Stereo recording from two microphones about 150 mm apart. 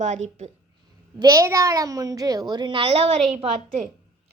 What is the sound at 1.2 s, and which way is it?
A woman's voice, 20° right (ahead or behind).